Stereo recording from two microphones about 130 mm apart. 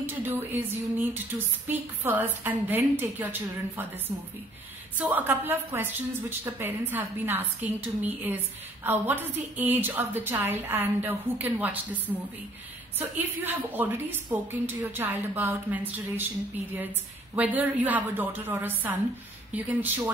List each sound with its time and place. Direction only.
0.0 s speech: 15° right (ahead or behind)
4.9 s speech: 15° right (ahead or behind)
13.4 s speech: 15° right (ahead or behind)
17.4 s speech: 10° right (ahead or behind)